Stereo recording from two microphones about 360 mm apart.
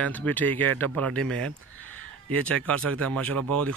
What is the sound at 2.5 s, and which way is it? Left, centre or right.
Speech, centre.